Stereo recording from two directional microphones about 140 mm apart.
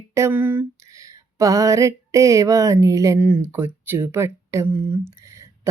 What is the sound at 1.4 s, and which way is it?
Mantra, 25° right (ahead or behind).